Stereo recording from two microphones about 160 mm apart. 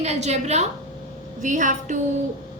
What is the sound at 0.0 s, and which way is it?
A woman's voice, 45° right (ahead or behind).